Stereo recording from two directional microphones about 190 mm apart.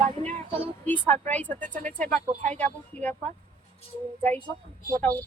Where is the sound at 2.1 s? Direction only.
40° right (ahead or behind).